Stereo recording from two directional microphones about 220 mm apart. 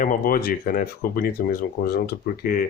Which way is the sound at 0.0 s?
40° left (ahead or behind).